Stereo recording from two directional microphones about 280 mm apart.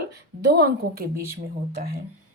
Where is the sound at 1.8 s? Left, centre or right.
Right.